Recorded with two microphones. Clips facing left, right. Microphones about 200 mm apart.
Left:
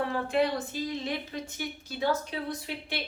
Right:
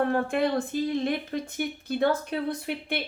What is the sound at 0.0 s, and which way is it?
Speech, 50° right (ahead or behind).